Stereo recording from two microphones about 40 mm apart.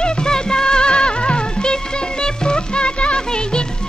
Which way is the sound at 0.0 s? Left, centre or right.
Left.